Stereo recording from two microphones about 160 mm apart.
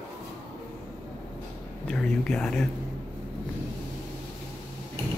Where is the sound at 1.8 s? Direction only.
5° left (ahead or behind).